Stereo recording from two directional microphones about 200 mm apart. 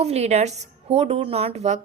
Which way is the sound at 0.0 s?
30° right (ahead or behind).